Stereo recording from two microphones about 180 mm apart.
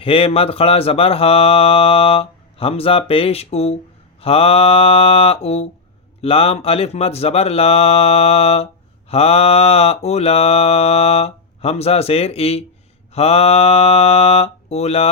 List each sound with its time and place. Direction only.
0.0 s speech: 30° left (ahead or behind)